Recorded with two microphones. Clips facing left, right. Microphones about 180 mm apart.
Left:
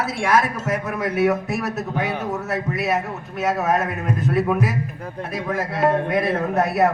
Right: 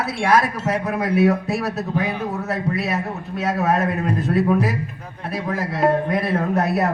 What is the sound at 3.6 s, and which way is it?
Speech, 35° right (ahead or behind).